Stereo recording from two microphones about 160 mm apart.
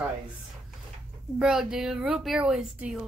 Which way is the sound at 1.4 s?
5° right (ahead or behind).